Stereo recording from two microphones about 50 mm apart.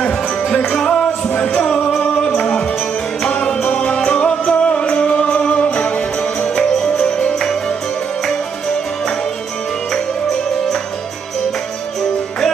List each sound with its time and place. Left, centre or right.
0.5 s music: centre
1.2 s music: left
1.5 s music: centre